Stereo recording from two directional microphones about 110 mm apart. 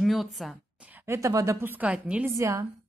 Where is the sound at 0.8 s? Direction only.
20° right (ahead or behind).